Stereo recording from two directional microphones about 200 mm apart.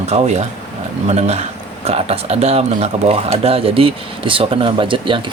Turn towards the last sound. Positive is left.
turn(degrees=-25)  # may be behind; listen again after turning